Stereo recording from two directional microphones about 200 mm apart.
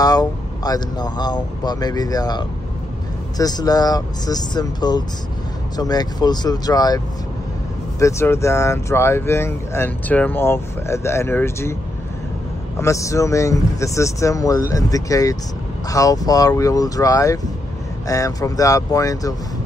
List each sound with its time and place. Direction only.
0.0 s speech: 20° left (ahead or behind)
8.0 s speech: 15° left (ahead or behind)
12.7 s speech: 15° left (ahead or behind)